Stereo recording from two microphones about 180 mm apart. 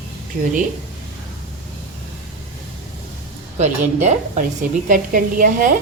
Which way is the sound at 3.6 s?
40° right (ahead or behind).